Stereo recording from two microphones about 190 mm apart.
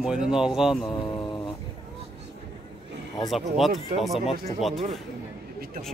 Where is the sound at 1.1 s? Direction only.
25° left (ahead or behind).